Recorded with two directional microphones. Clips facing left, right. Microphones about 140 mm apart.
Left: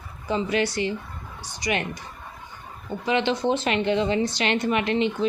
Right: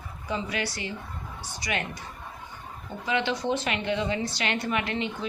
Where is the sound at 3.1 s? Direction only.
25° left (ahead or behind).